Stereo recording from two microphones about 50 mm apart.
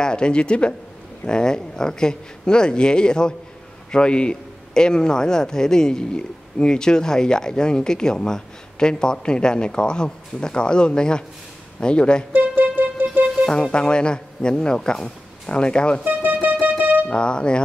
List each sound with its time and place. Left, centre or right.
0.0 s a man's voice: centre
12.3 s music: right
13.5 s a man's voice: centre
16.0 s music: right
17.1 s speech: centre